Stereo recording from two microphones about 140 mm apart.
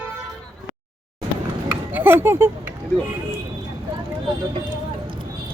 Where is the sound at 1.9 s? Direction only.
15° right (ahead or behind).